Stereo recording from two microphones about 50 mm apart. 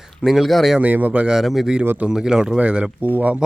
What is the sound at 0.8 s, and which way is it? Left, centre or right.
Speech, right.